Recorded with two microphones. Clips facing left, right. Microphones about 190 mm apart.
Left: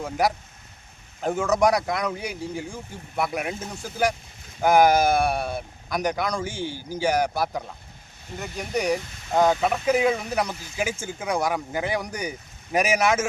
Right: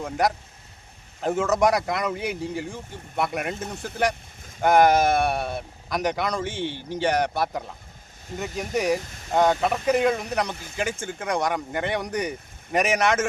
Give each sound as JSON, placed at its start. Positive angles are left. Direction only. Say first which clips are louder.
{"t": 0.0, "sound": "speech", "louder": "even", "side_deg": 0}
{"t": 8.3, "sound": "speech", "louder": "right 3 dB", "side_deg": -45}
{"t": 8.7, "sound": "speech", "louder": "even", "side_deg": 0}